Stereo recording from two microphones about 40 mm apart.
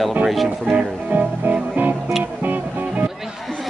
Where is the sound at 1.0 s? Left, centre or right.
Right.